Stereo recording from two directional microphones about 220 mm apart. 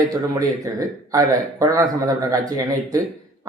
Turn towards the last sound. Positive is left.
turn(degrees=-15)  # may be behind; listen again after turning